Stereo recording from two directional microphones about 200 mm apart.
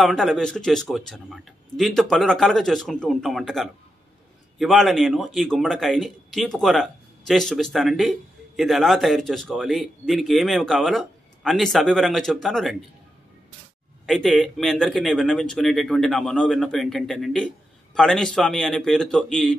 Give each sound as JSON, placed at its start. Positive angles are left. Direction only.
{"t": 0.0, "sound": "a man's voice", "side_deg": 0}
{"t": 14.0, "sound": "a man's voice", "side_deg": 0}